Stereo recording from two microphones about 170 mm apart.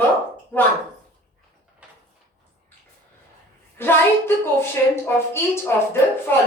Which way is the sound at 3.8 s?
15° left (ahead or behind).